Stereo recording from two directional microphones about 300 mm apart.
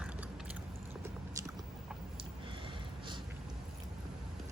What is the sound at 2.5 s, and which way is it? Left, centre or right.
Snort, centre.